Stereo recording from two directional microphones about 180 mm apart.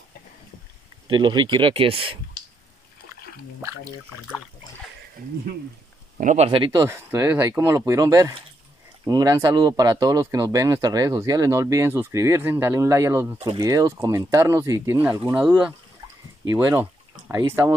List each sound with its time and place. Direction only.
1.0 s speech: 25° right (ahead or behind)
6.1 s speech: 40° right (ahead or behind); by 17.7 s 15° right (ahead or behind)